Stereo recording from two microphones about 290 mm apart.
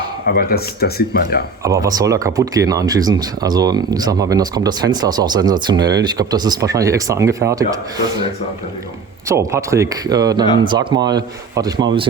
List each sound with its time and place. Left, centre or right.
0.3 s speech: left
1.6 s speech: centre
9.3 s speech: centre